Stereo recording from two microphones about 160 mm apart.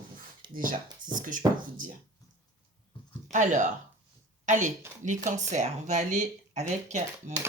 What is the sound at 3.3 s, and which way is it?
A woman's voice, 50° right (ahead or behind).